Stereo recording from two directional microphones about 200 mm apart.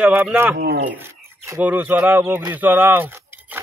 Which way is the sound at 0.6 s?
50° right (ahead or behind).